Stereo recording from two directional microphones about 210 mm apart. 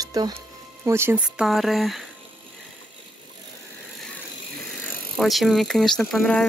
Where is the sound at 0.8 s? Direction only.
10° right (ahead or behind).